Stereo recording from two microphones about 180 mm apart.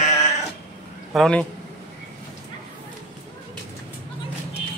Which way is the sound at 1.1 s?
5° left (ahead or behind).